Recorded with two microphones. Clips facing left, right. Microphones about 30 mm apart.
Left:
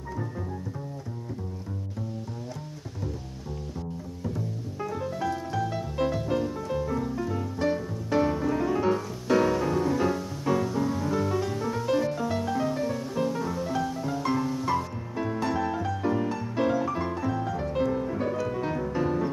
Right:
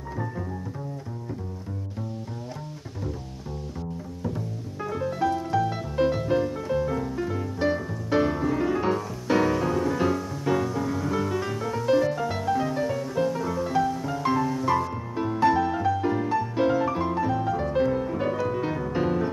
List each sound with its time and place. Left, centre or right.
4.9 s music: centre
11.1 s music: centre
15.4 s music: right